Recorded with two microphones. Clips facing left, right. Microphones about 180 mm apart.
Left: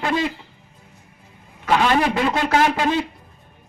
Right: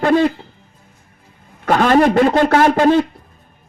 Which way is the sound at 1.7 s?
45° right (ahead or behind).